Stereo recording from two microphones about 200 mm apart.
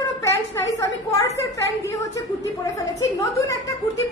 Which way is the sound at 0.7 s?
15° left (ahead or behind).